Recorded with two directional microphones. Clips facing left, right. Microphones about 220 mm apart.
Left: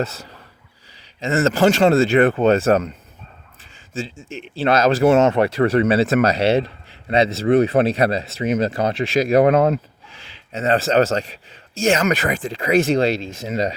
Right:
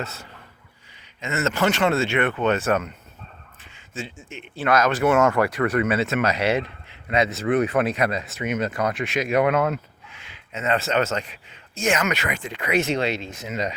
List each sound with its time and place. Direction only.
0.0 s a sound: 90° left
1.2 s speech: 35° left (ahead or behind)
3.9 s speech: 30° left (ahead or behind)